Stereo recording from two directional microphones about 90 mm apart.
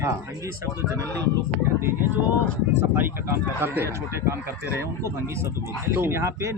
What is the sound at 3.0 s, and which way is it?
A man's voice, 25° right (ahead or behind).